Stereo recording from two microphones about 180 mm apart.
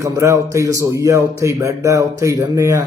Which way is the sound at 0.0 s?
15° right (ahead or behind).